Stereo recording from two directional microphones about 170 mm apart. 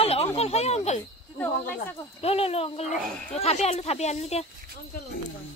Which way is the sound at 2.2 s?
35° left (ahead or behind).